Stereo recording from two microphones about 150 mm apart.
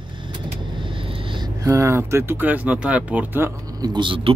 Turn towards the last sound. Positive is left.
turn(degrees=-35)  # may be behind; listen again after turning